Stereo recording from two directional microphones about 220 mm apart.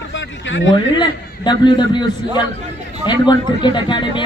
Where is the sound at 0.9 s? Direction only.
20° left (ahead or behind).